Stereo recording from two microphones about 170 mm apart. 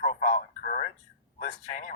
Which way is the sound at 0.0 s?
50° left (ahead or behind).